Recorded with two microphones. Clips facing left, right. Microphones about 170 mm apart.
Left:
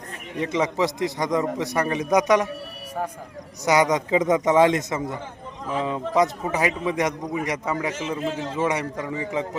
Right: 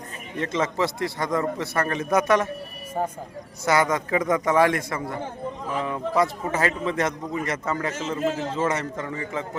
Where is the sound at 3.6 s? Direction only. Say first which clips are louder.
Left 2 dB; 15° left (ahead or behind).